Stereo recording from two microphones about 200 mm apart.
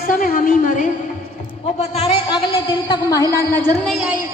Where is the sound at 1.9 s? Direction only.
30° left (ahead or behind).